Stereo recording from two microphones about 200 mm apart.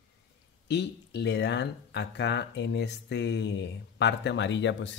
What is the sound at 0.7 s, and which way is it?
Speech, 60° left (ahead or behind).